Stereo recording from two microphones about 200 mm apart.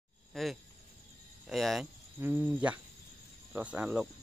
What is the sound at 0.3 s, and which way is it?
Speech, centre (ahead or behind).